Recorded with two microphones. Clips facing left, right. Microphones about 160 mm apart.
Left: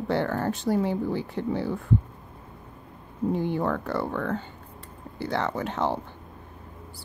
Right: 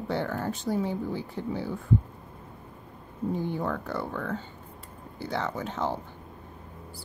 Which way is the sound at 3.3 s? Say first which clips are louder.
Left 4 dB; 70° left (ahead or behind).